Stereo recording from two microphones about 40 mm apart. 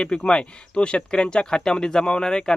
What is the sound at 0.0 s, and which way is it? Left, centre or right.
Speech, left.